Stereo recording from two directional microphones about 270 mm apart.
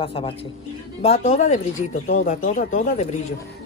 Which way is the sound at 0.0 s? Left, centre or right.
Left.